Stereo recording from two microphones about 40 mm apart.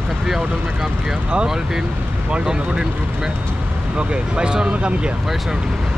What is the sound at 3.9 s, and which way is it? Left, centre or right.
Speech, right.